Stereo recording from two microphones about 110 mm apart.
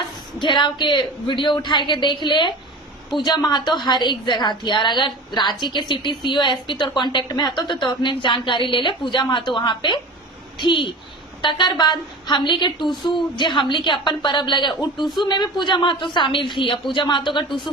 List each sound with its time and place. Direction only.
0.3 s a woman's voice: 45° left (ahead or behind)